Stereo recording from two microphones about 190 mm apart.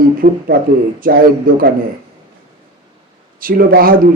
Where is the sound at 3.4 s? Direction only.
50° right (ahead or behind).